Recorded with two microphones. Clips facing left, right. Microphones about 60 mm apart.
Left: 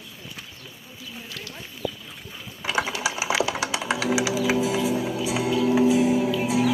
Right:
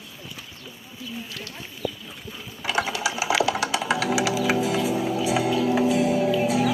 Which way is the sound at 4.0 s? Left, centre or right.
Centre.